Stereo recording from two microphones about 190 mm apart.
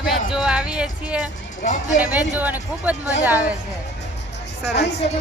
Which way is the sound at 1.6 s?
40° left (ahead or behind).